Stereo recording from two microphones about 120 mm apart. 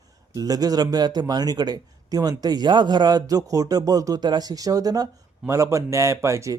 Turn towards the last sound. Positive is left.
turn(degrees=-25)  # may be behind; listen again after turning